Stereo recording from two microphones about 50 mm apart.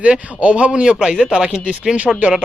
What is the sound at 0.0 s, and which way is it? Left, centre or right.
Speech, right.